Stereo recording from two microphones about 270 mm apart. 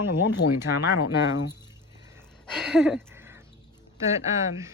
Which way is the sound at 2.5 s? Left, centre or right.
Centre.